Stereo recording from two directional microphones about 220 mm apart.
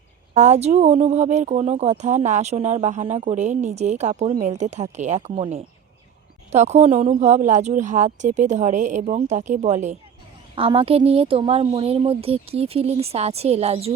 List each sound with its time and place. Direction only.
0.3 s a woman's voice: 30° right (ahead or behind)